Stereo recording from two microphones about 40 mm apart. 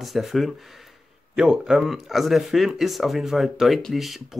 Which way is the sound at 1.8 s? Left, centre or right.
Centre.